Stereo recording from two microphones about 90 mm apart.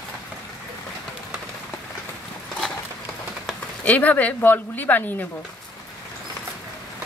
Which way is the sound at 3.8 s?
15° left (ahead or behind).